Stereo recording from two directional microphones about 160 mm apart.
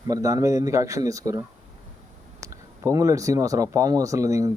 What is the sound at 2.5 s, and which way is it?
Speech, 20° right (ahead or behind).